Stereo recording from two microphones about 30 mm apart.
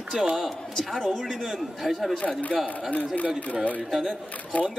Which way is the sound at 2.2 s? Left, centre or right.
Left.